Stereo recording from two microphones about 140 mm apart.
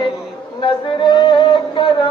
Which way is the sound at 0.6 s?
35° left (ahead or behind).